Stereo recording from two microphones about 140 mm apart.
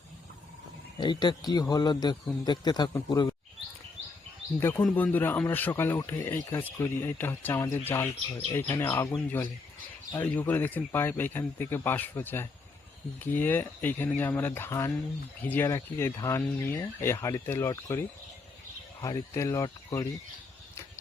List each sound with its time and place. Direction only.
0.9 s a man's voice: 30° left (ahead or behind)
4.6 s speech: 15° left (ahead or behind)
19.0 s speech: 20° left (ahead or behind)